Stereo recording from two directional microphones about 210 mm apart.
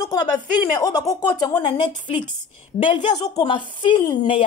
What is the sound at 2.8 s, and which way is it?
A woman's voice, 20° left (ahead or behind).